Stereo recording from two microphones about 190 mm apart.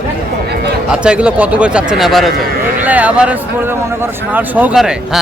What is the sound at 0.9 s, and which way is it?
Speech, 5° right (ahead or behind).